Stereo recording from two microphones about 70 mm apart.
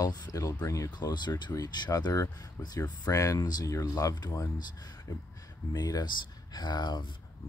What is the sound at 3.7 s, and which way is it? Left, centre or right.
Speech, left.